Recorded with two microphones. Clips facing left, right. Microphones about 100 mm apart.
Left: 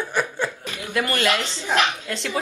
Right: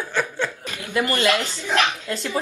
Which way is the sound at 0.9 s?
15° right (ahead or behind).